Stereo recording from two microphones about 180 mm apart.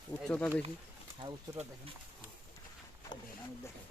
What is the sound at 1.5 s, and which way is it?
Speech, 15° right (ahead or behind).